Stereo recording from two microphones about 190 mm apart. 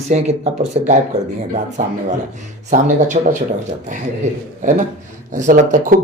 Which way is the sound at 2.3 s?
40° right (ahead or behind).